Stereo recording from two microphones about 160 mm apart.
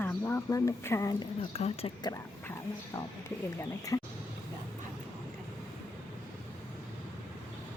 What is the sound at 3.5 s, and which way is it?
Speech, 20° left (ahead or behind).